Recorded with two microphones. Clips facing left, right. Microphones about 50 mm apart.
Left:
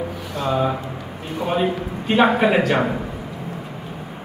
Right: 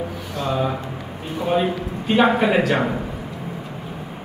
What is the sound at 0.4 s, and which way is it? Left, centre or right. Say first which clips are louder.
A man's voice: left 2 dB; centre.